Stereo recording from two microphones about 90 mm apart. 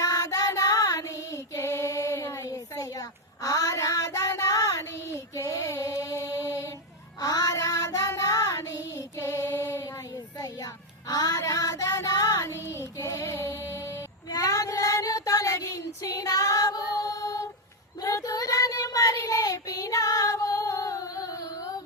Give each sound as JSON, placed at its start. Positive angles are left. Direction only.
{"t": 0.0, "sound": "child singing", "side_deg": 40}
{"t": 11.1, "sound": "child singing", "side_deg": 40}